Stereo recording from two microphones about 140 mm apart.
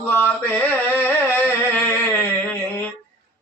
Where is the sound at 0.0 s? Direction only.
15° left (ahead or behind).